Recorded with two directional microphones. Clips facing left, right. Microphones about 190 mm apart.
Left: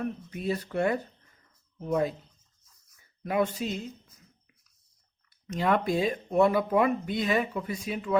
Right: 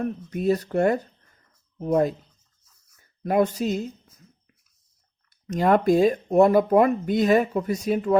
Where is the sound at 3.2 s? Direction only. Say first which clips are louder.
Right 6 dB; 40° right (ahead or behind).